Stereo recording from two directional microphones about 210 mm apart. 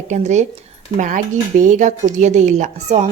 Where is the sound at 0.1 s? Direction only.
35° right (ahead or behind).